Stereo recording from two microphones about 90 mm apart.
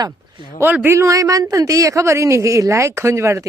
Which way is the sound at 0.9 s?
35° right (ahead or behind).